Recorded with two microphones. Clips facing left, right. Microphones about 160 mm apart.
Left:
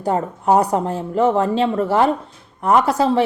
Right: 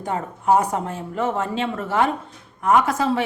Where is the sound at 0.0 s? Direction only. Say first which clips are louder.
Left 5 dB; 40° left (ahead or behind).